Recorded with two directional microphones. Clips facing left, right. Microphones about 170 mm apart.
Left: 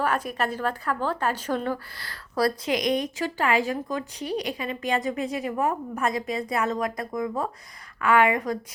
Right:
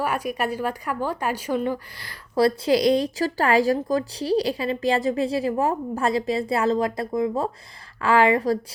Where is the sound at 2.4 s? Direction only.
30° right (ahead or behind).